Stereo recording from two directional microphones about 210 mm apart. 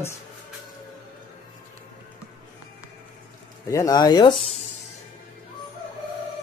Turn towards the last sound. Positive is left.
turn(degrees=20)  # may be behind; listen again after turning